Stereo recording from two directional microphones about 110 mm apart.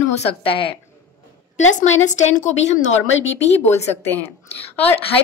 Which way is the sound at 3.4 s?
85° left.